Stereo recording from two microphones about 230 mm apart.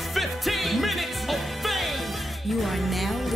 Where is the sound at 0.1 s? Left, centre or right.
Centre.